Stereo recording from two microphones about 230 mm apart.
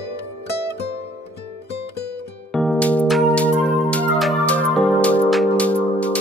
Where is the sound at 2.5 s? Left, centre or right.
Centre.